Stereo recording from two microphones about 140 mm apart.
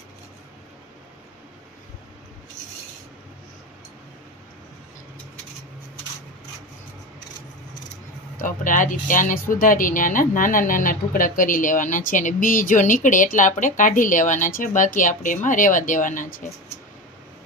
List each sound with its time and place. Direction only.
8.4 s speech: 70° left (ahead or behind)